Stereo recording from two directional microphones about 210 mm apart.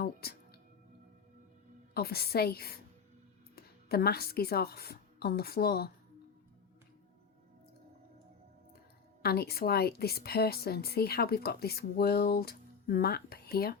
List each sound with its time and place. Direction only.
0.0 s a woman's voice: 45° left (ahead or behind)
1.9 s a woman's voice: 50° left (ahead or behind)
9.2 s a woman's voice: 50° left (ahead or behind)